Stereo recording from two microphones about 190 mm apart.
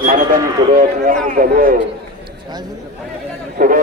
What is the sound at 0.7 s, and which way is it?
Speech, 45° right (ahead or behind).